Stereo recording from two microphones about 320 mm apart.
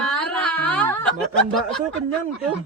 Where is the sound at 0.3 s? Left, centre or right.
Centre.